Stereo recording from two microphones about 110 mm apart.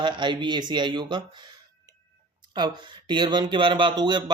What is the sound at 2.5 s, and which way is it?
Speech, 40° right (ahead or behind).